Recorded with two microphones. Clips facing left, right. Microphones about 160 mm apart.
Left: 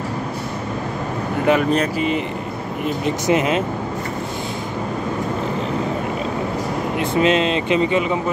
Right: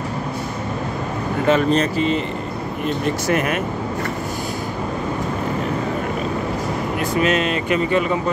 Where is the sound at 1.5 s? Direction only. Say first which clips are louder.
Right 1 dB; 10° left (ahead or behind).